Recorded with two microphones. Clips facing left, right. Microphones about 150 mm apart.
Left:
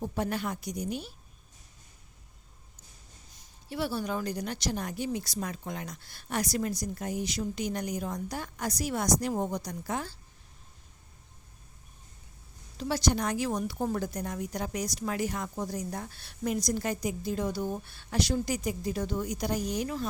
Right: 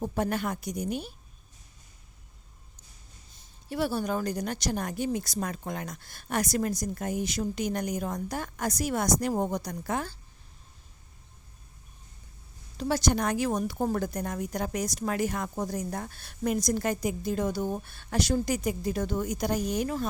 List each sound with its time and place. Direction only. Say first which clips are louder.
0.0 s a woman's voice: right 3 dB; 50° right (ahead or behind)
3.7 s a woman's voice: right 3 dB; 45° right (ahead or behind)
12.7 s a woman's voice: right 2 dB; 50° right (ahead or behind)